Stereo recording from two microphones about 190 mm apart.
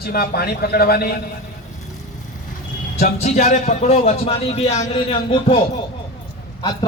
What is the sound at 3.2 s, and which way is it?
A man's voice, 35° left (ahead or behind).